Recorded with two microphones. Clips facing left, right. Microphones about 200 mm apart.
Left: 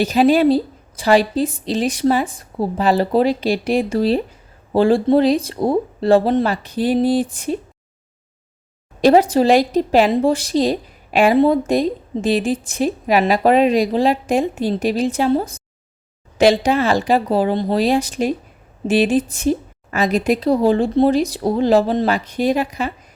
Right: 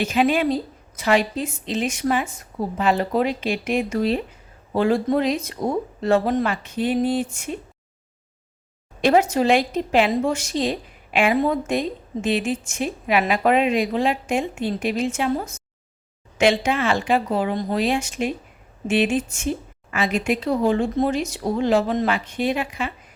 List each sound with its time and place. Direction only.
0.0 s speech: 35° left (ahead or behind)
9.0 s speech: 35° left (ahead or behind)